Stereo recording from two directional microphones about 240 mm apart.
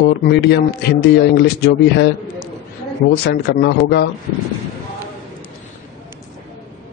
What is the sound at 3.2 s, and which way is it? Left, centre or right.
Speech, left.